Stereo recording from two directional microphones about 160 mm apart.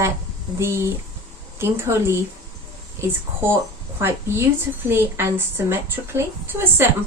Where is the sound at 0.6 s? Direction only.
15° right (ahead or behind).